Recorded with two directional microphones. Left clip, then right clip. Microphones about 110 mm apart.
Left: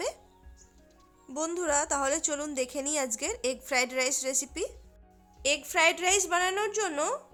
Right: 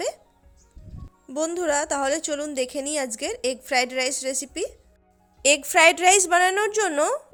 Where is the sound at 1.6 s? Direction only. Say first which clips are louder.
Right 4 dB; 35° right (ahead or behind).